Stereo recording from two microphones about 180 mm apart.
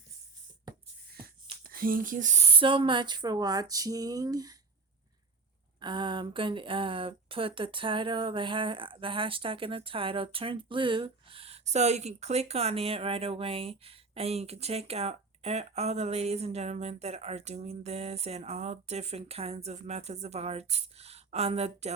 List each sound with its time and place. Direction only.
1.6 s speech: 50° right (ahead or behind); by 4.5 s 20° right (ahead or behind)
5.8 s speech: 25° right (ahead or behind)